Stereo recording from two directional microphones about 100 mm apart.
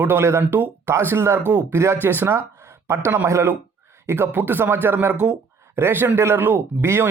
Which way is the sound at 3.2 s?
25° right (ahead or behind).